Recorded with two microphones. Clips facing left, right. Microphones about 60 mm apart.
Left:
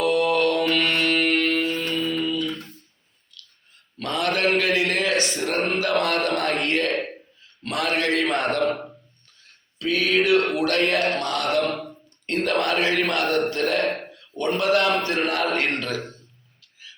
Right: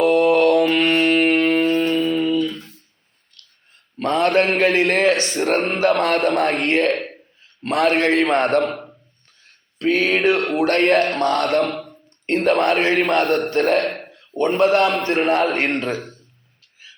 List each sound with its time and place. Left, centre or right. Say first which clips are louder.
0.0 s music: right 6 dB; right
1.5 s music: right 7 dB; right
3.3 s a sound: left 3 dB; right
3.9 s a man's voice: right 8 dB; right
9.7 s a man's voice: right 3 dB; right
11.7 s a sound: right 1 dB; centre
12.2 s a man's voice: right 6 dB; right
13.8 s a sound: even; centre
14.1 s a man's voice: right 5 dB; right